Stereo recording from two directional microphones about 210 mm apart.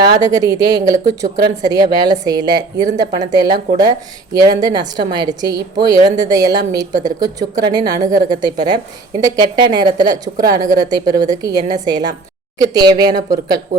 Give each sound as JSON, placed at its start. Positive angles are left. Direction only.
{"t": 0.0, "sound": "a woman's voice", "side_deg": -20}